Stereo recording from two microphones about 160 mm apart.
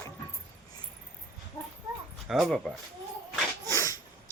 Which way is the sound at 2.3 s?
Centre (ahead or behind).